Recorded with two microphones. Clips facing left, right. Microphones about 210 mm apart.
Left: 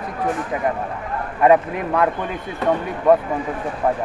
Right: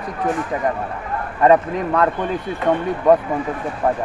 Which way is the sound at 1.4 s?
10° left (ahead or behind).